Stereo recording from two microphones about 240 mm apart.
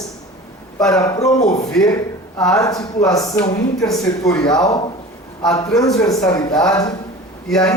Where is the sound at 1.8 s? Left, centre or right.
Centre.